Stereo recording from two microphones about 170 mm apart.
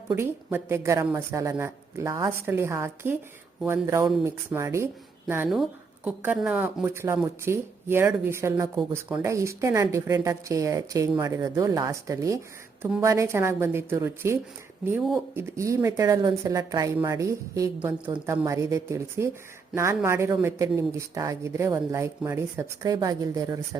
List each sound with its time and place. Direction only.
0.2 s speech: 15° right (ahead or behind)
6.1 s a woman's voice: 5° right (ahead or behind); by 23.6 s 20° right (ahead or behind)